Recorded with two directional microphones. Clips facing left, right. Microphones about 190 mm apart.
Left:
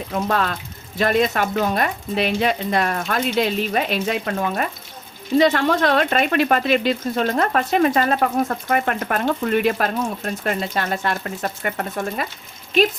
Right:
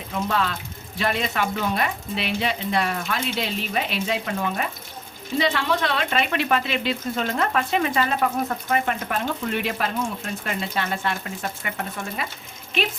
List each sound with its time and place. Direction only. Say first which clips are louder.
0.1 s speech: left 3 dB; 50° left (ahead or behind)